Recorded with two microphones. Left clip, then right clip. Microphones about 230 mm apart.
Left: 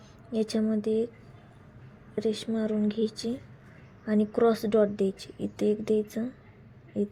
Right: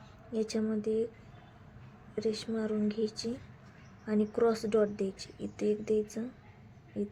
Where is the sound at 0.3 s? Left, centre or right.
Left.